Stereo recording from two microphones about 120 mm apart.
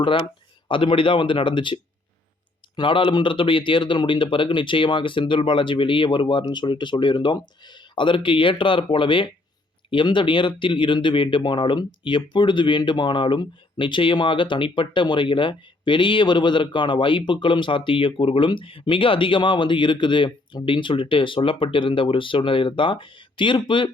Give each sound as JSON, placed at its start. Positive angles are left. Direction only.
{"t": 0.0, "sound": "speech", "side_deg": 45}